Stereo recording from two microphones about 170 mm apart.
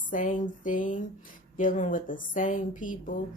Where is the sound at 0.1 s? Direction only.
50° left (ahead or behind).